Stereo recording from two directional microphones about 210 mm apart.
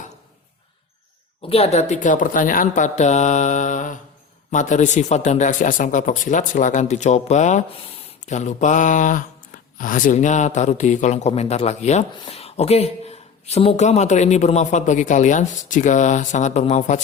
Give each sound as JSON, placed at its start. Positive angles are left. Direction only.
{"t": 1.4, "sound": "a man's voice", "side_deg": 30}